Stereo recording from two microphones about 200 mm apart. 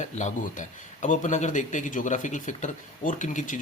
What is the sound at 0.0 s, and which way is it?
Speech, 35° left (ahead or behind).